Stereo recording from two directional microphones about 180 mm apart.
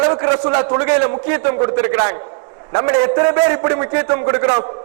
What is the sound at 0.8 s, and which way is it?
Speech, 15° right (ahead or behind).